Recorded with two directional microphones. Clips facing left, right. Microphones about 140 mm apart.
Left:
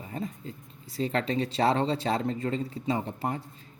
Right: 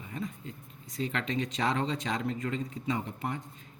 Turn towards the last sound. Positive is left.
turn(degrees=35)  # may be behind; listen again after turning